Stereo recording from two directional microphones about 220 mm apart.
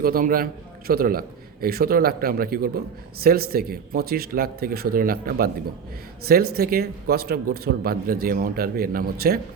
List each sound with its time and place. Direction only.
0.0 s a man's voice: 40° right (ahead or behind)